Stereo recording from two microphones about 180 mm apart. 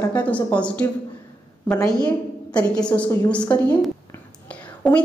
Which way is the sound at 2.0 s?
20° left (ahead or behind).